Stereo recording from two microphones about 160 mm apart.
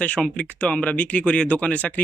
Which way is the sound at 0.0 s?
5° left (ahead or behind).